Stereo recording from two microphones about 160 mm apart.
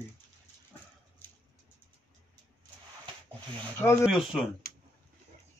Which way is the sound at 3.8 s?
15° left (ahead or behind).